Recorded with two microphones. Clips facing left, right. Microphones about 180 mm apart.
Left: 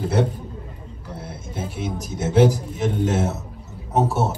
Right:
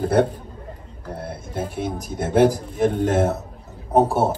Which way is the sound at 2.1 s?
55° right (ahead or behind).